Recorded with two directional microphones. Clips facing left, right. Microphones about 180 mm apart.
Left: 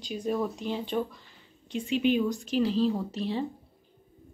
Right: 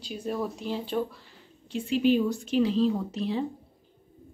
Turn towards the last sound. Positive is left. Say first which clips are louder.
# right 1 dB
turn(degrees=0)  # may be behind; listen again after turning